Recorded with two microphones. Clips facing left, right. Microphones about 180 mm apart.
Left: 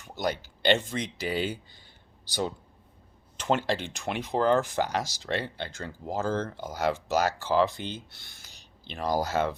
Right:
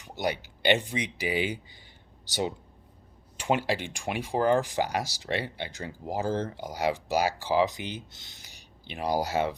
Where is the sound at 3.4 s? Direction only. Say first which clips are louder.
Even; 10° right (ahead or behind).